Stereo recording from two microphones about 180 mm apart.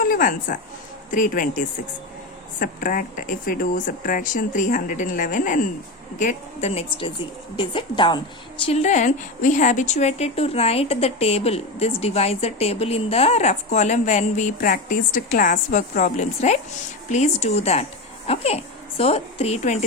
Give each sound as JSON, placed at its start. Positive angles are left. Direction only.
{"t": 0.0, "sound": "a woman's voice", "side_deg": 50}
{"t": 8.6, "sound": "a woman's voice", "side_deg": 40}